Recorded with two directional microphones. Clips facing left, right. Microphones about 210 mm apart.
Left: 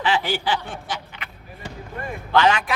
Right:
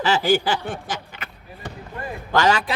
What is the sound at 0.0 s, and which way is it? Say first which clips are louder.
Speech: right 4 dB; 45° right (ahead or behind).